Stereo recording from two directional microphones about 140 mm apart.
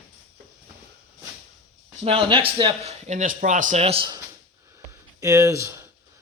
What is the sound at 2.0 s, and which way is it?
Speech, 40° right (ahead or behind).